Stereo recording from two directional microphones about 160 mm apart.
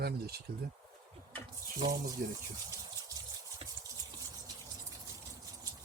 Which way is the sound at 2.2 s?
60° right (ahead or behind).